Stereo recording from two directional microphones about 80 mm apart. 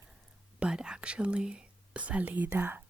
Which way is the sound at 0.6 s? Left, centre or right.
Centre.